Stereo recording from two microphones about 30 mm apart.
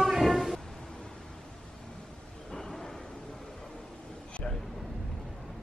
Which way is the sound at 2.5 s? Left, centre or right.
Centre.